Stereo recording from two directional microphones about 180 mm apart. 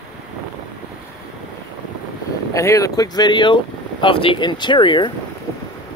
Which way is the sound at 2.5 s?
15° left (ahead or behind).